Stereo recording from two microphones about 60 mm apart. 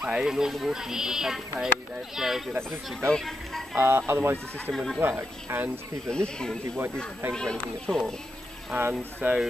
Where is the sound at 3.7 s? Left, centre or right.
Right.